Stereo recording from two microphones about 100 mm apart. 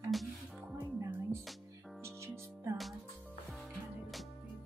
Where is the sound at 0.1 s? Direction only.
Centre (ahead or behind).